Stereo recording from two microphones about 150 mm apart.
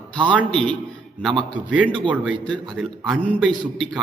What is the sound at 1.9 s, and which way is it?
Speech, 35° right (ahead or behind).